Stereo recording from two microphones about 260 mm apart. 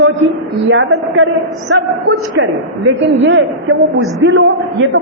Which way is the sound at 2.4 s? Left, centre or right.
Right.